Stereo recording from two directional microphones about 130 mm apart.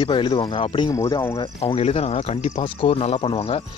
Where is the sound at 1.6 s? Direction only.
50° left (ahead or behind).